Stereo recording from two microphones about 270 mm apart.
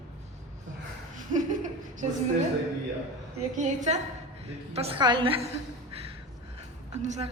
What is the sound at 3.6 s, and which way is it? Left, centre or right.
A man's voice, right.